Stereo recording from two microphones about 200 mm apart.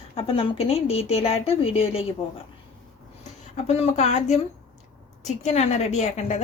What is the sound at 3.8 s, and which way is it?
Speech, 35° left (ahead or behind).